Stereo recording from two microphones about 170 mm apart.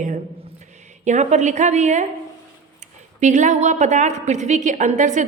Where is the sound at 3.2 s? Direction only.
45° right (ahead or behind).